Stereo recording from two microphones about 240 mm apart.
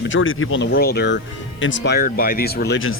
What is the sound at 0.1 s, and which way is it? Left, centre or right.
Speech, left.